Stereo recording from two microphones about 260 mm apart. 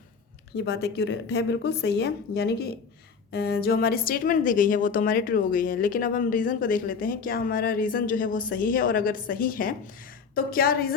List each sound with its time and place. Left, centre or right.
0.5 s a woman's voice: left